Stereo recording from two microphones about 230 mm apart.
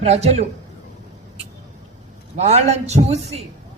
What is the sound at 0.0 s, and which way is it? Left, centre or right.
Speech, right.